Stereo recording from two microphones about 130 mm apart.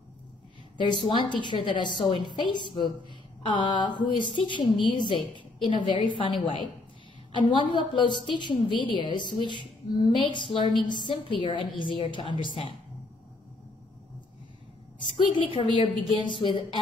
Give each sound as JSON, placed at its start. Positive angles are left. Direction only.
{"t": 0.7, "sound": "a woman's voice", "side_deg": 40}
{"t": 15.3, "sound": "a woman's voice", "side_deg": 40}